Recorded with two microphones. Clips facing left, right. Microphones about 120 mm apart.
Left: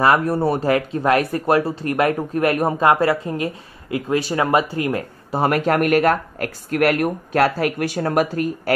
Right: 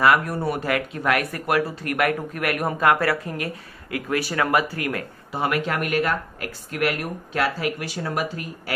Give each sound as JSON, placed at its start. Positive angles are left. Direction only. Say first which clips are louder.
{"t": 0.0, "sound": "speech", "louder": "left 3 dB", "side_deg": 30}
{"t": 5.3, "sound": "speech", "louder": "left 6 dB", "side_deg": 40}